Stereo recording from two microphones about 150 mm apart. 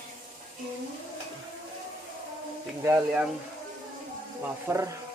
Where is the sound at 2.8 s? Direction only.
10° right (ahead or behind).